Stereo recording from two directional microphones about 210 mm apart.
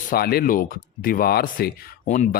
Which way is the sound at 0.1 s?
45° left (ahead or behind).